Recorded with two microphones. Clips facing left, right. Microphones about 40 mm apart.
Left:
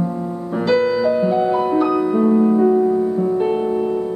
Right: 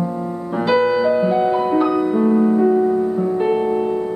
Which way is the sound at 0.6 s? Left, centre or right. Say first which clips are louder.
Right 1 dB; centre.